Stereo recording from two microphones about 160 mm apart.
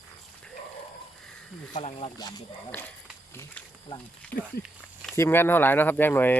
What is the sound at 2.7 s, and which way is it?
Speech, 10° left (ahead or behind).